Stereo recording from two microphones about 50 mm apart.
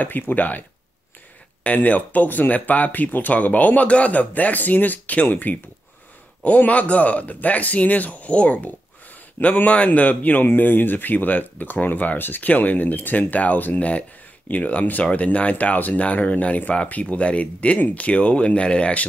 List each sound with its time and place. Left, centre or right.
0.3 s speech: left